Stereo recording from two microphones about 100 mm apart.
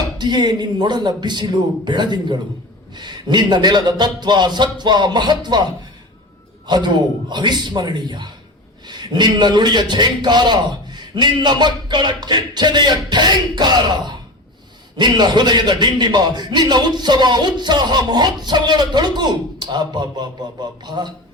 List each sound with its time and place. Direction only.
0.2 s a man's voice: 45° right (ahead or behind)
6.7 s a man's voice: 50° right (ahead or behind)